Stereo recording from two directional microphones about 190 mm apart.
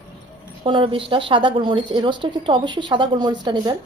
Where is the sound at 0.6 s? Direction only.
25° right (ahead or behind).